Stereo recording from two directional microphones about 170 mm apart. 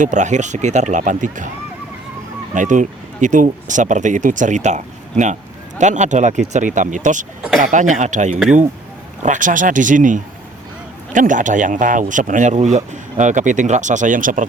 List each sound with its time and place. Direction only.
0.0 s speech: 45° right (ahead or behind)
2.6 s speech: 50° right (ahead or behind)